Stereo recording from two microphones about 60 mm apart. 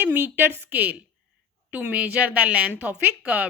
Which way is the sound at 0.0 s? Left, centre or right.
Right.